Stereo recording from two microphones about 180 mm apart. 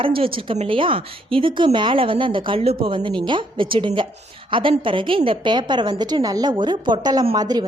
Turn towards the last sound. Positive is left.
turn(degrees=-20)  # may be behind; listen again after turning